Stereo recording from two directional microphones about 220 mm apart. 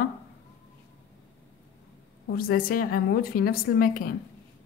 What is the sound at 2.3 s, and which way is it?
A woman's voice, 40° left (ahead or behind).